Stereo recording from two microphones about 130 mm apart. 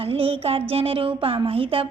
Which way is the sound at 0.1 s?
45° right (ahead or behind).